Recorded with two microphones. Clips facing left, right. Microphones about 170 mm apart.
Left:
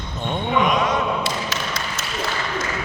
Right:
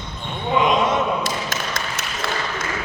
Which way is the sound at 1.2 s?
50° right (ahead or behind).